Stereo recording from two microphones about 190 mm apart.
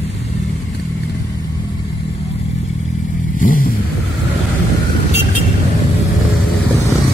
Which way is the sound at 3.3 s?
45° left (ahead or behind).